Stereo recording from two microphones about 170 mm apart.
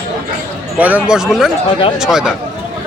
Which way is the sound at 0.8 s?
10° right (ahead or behind).